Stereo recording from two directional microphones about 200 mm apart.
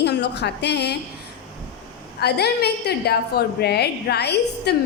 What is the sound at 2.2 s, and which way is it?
A woman's voice, 55° left (ahead or behind).